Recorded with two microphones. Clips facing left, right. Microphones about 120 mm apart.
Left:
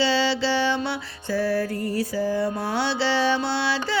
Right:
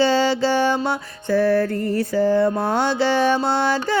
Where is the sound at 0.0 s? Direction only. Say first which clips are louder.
Right 5 dB; 45° right (ahead or behind).